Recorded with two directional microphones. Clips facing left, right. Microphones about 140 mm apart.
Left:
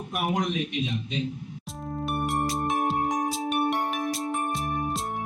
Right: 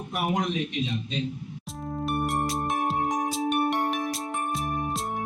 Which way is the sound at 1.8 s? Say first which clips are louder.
Right 1 dB; centre (ahead or behind).